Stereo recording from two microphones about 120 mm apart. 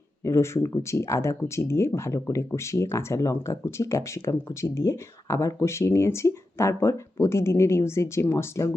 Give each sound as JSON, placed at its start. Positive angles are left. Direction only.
{"t": 0.3, "sound": "speech", "side_deg": 20}